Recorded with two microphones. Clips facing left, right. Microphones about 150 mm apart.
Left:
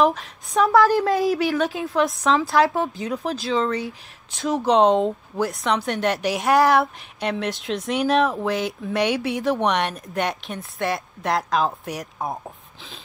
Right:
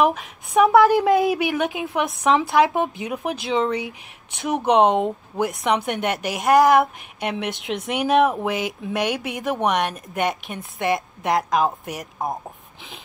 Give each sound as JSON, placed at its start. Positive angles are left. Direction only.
{"t": 0.6, "sound": "speech", "side_deg": -15}